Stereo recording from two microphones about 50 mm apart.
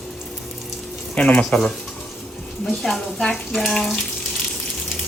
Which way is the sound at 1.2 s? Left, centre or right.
Left.